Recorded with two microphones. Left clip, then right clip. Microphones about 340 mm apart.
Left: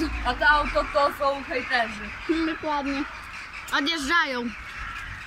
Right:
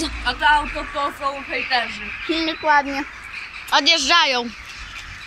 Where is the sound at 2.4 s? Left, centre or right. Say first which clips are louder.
Right 9 dB; right.